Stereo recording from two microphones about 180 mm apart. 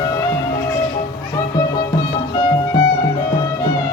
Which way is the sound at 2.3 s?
25° left (ahead or behind).